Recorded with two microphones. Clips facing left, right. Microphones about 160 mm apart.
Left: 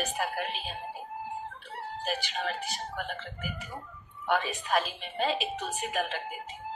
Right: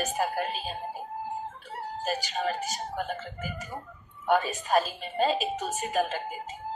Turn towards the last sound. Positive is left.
turn(degrees=-40)  # may be behind; listen again after turning